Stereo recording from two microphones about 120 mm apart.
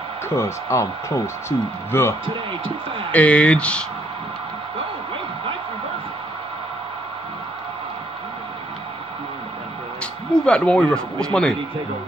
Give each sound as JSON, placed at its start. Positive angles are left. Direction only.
{"t": 0.3, "sound": "speech", "side_deg": 25}
{"t": 2.2, "sound": "speech", "side_deg": -50}
{"t": 3.1, "sound": "speech", "side_deg": 10}
{"t": 10.3, "sound": "speech", "side_deg": 10}